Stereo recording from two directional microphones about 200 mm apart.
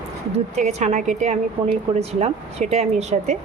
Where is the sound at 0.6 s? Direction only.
35° right (ahead or behind).